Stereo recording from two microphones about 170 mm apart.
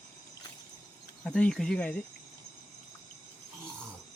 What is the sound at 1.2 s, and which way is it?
Speech, 5° left (ahead or behind).